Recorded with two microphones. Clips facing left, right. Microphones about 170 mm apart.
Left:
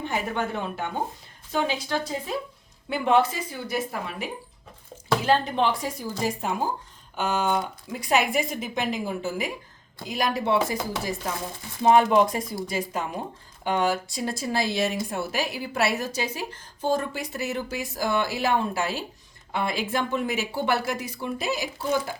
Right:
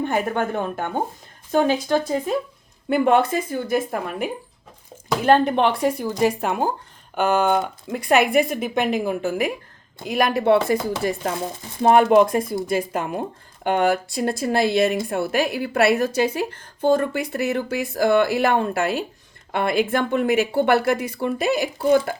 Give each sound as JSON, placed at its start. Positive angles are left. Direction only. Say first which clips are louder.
{"t": 0.0, "sound": "a woman's voice", "louder": "right 6 dB", "side_deg": -50}